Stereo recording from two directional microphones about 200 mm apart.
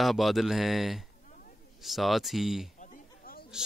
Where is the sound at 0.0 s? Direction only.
Centre (ahead or behind).